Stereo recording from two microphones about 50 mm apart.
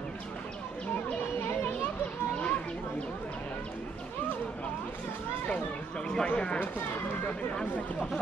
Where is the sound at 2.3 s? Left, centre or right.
Left.